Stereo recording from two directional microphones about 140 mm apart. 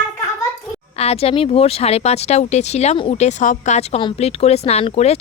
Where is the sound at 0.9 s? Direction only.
45° left (ahead or behind).